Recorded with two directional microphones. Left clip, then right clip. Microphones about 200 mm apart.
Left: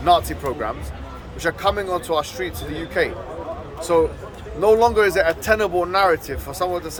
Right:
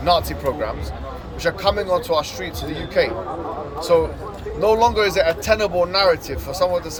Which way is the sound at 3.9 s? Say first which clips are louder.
Right 1 dB; 15° left (ahead or behind).